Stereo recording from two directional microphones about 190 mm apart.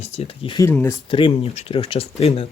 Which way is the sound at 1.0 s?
25° left (ahead or behind).